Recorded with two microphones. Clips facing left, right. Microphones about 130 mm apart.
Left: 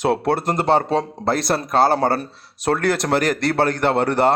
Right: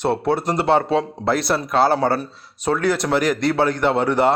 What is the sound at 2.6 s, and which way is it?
Speech, 75° left (ahead or behind).